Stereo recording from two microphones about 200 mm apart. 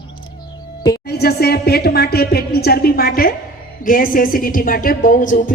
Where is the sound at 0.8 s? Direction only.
20° left (ahead or behind).